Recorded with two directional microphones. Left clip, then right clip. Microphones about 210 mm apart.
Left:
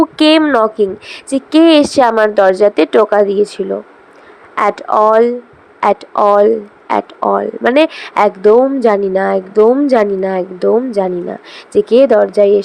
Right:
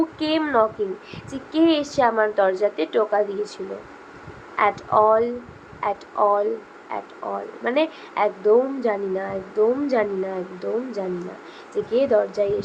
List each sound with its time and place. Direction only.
0.2 s a woman's voice: 45° left (ahead or behind)